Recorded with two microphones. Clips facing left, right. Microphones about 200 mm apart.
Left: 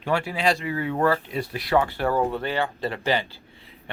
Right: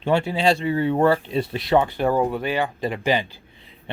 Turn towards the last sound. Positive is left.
turn(degrees=-20)  # may be behind; listen again after turning